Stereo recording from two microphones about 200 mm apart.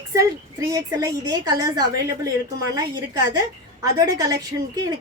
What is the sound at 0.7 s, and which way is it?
A woman's voice, 15° right (ahead or behind).